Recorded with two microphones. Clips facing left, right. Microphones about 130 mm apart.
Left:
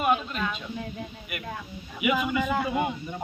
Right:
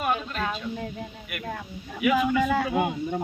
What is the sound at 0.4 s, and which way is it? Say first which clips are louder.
Speech: right 2 dB; 40° right (ahead or behind).